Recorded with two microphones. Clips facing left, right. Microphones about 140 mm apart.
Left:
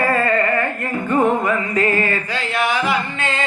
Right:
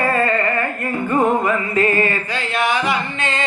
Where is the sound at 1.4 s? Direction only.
25° right (ahead or behind).